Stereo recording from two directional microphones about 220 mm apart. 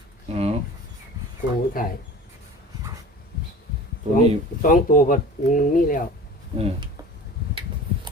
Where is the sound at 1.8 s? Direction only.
40° left (ahead or behind).